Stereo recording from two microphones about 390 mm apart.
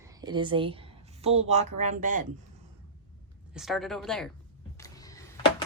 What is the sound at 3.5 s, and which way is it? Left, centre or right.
Speech, centre.